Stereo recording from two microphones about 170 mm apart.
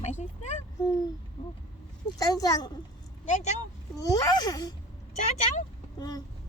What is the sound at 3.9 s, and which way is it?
Speech, 20° left (ahead or behind).